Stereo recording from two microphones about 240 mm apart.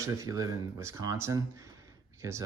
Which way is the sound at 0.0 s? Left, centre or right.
Centre.